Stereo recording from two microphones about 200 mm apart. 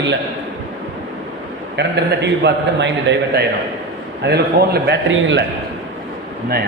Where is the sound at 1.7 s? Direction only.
60° right (ahead or behind).